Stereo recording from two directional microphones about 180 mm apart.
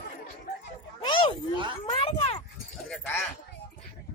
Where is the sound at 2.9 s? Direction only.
5° left (ahead or behind).